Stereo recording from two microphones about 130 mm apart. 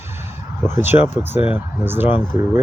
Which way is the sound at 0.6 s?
15° right (ahead or behind).